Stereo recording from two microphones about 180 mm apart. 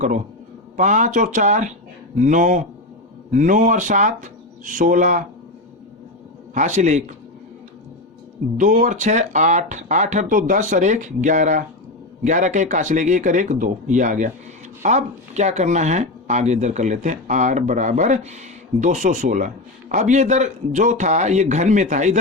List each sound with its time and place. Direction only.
0.8 s speech: 45° right (ahead or behind)
6.5 s speech: 40° right (ahead or behind)
8.5 s speech: 45° right (ahead or behind)